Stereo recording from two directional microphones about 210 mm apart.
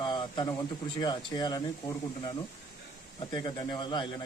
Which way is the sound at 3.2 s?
20° left (ahead or behind).